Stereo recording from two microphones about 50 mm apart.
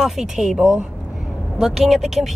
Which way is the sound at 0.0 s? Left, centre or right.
Centre.